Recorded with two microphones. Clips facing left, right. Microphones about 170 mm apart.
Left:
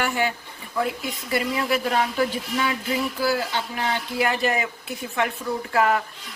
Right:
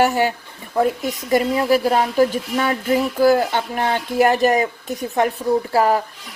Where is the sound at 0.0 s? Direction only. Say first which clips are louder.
Right 7 dB; 40° right (ahead or behind).